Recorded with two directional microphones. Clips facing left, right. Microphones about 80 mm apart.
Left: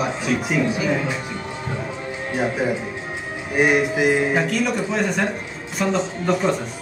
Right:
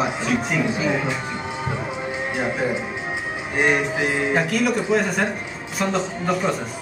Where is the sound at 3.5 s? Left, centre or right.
Centre.